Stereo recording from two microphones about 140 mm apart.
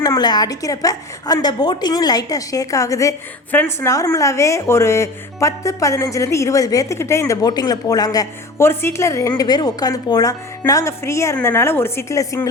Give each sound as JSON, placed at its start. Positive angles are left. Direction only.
{"t": 0.0, "sound": "a woman's voice", "side_deg": 25}